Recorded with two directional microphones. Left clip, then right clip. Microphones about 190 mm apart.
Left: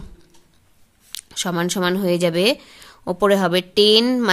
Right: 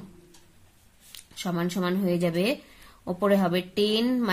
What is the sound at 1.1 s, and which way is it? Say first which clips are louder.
Speech: left 9 dB; 55° left (ahead or behind).